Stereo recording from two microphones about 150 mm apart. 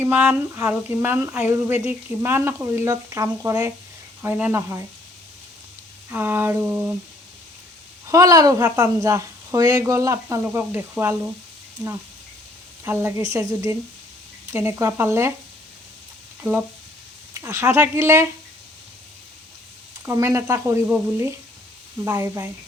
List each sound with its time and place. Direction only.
0.0 s speech: 10° right (ahead or behind)
6.1 s speech: 15° right (ahead or behind)
8.0 s a woman's voice: 20° right (ahead or behind)
12.8 s a woman's voice: 15° right (ahead or behind)
16.4 s speech: 10° right (ahead or behind)
20.1 s a woman's voice: 20° right (ahead or behind)